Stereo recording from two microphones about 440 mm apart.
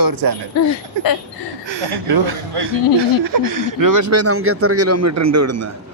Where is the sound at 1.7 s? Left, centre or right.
Right.